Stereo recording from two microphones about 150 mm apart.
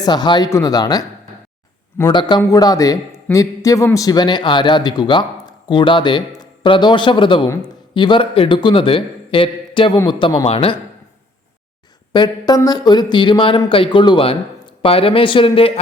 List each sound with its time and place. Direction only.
0.0 s a man's voice: 30° left (ahead or behind)
12.1 s a man's voice: 30° left (ahead or behind)